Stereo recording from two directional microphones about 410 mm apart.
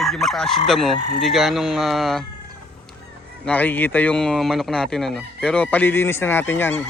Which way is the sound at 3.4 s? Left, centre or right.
Centre.